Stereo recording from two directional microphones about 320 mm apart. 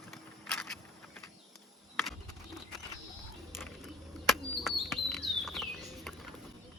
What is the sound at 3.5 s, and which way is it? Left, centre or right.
Bird, centre.